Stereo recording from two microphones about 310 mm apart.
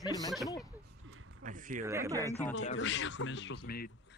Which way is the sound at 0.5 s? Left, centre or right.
Centre.